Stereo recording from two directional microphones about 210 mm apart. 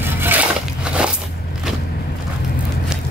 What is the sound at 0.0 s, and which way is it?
Crushing, 10° right (ahead or behind).